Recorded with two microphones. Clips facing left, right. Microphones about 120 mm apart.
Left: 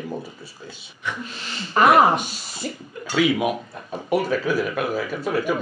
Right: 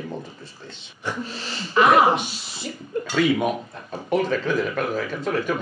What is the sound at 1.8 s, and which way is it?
Speech, 45° left (ahead or behind).